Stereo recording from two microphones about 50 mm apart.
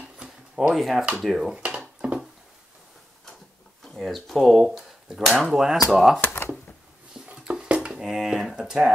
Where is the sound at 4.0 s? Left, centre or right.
Centre.